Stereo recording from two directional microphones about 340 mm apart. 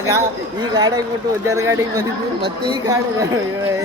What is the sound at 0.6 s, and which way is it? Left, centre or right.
Speech, centre.